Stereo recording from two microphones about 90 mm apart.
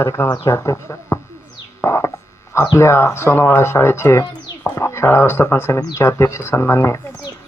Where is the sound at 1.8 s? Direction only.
30° left (ahead or behind).